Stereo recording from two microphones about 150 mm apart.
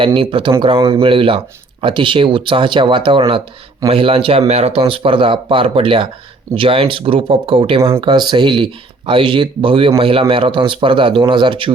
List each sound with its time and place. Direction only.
0.0 s speech: 35° right (ahead or behind)